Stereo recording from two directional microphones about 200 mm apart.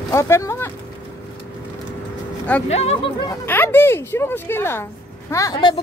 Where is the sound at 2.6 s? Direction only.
30° left (ahead or behind).